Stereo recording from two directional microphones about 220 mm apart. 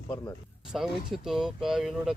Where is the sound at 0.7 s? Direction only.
Centre (ahead or behind).